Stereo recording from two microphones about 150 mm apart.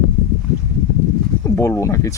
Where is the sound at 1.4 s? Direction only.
20° left (ahead or behind).